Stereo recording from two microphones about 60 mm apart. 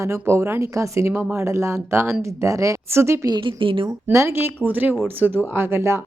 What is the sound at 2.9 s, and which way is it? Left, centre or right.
Speech, right.